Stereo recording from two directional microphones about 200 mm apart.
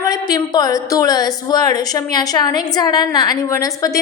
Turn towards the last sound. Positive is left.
turn(degrees=15)  # may be behind; listen again after turning